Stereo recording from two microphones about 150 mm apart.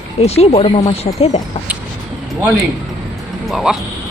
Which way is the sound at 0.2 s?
45° left (ahead or behind).